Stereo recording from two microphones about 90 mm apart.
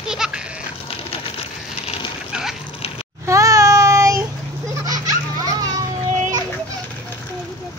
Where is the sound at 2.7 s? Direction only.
90° left.